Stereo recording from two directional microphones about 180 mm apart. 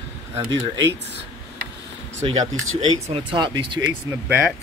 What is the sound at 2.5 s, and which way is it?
Speech, 90° right.